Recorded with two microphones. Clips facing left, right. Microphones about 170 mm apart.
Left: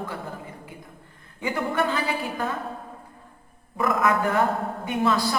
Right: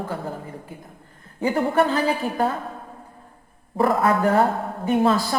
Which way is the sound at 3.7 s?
30° right (ahead or behind).